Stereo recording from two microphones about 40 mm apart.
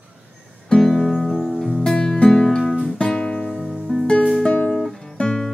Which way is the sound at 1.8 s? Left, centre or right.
Centre.